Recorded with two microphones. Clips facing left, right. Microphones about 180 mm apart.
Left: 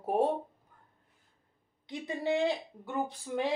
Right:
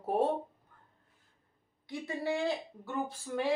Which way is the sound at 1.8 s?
20° left (ahead or behind).